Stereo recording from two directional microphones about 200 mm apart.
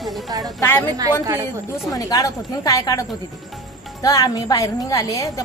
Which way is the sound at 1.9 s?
20° left (ahead or behind).